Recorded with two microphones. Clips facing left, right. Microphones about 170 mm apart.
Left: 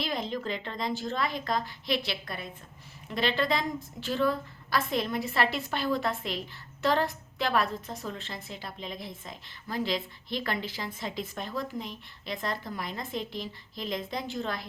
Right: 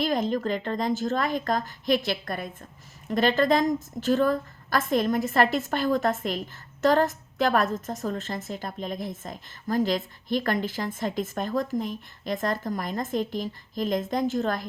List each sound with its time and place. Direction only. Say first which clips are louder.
0.0 s a woman's voice: right 7 dB; 45° right (ahead or behind)